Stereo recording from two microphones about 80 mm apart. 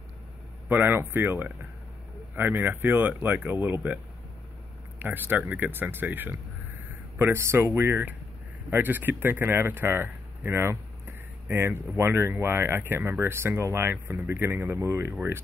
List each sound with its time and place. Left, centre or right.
0.7 s speech: right